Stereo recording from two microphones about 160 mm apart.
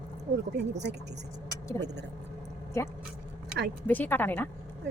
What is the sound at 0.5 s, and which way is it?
Speech, 90° right.